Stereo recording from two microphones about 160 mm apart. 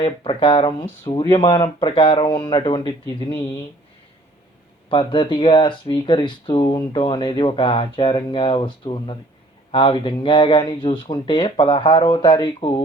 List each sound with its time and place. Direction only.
0.0 s speech: 30° left (ahead or behind)
4.9 s speech: 30° left (ahead or behind)